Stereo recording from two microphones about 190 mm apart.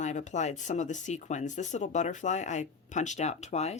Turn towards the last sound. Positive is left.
turn(degrees=35)  # may be behind; listen again after turning